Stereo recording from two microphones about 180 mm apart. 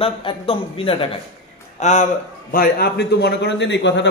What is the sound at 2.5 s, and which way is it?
A man's voice, 55° left (ahead or behind).